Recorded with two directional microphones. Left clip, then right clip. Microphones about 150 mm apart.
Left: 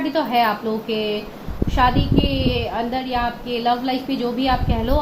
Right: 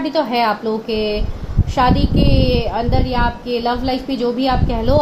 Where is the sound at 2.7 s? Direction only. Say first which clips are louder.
Right 3 dB; 60° right (ahead or behind).